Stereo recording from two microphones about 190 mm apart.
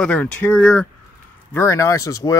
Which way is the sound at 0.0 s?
5° left (ahead or behind).